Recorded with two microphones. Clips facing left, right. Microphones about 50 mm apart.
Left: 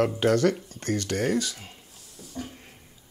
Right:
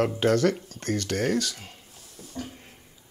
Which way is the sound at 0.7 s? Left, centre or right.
Left.